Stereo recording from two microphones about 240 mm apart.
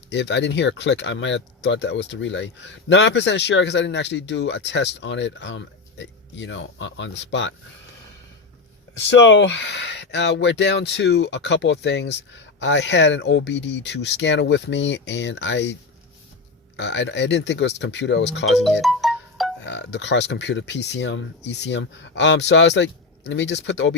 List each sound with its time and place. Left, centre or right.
0.1 s speech: left
9.0 s speech: left
16.7 s speech: left
18.4 s speech: centre
18.8 s music: centre
19.6 s speech: left